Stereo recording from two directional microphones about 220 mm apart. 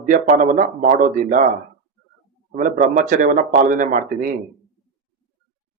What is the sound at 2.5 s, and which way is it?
Speech, 40° right (ahead or behind).